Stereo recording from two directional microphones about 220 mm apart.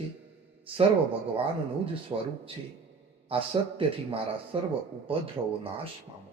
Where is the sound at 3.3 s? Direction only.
25° right (ahead or behind).